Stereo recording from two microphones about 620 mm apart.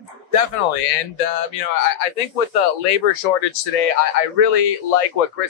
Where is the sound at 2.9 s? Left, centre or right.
Left.